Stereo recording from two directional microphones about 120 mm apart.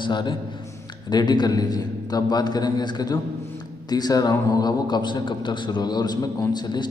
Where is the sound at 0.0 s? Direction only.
40° left (ahead or behind).